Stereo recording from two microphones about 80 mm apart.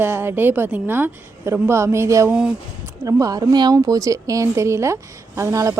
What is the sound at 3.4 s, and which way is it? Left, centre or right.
Speech, right.